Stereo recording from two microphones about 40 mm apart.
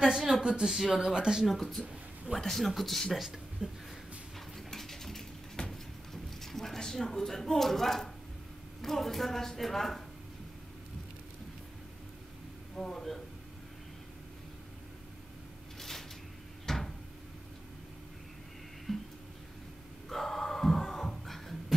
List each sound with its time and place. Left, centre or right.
0.0 s speech: centre
1.1 s speech: centre
1.4 s speech: centre
3.6 s speech: right
4.6 s a sound: centre
6.4 s speech: centre
12.7 s speech: centre
15.8 s a sound: centre
16.6 s cupboard open or close: centre
18.9 s music: centre
20.1 s music: centre